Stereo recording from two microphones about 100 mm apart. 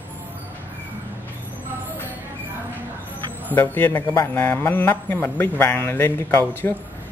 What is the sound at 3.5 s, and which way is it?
A man's voice, 20° left (ahead or behind).